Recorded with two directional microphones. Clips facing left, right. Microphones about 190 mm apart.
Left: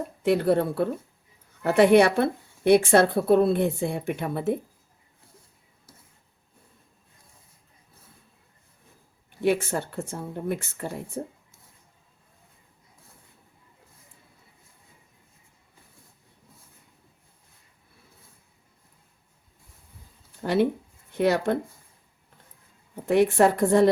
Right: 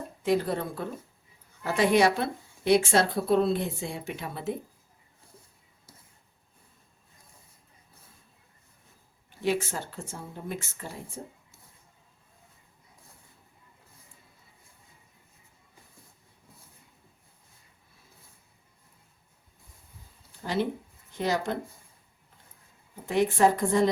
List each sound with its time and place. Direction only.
0.2 s a woman's voice: 65° left (ahead or behind)
9.3 s a woman's voice: 60° left (ahead or behind)
20.4 s speech: 60° left (ahead or behind)
23.0 s a woman's voice: 60° left (ahead or behind)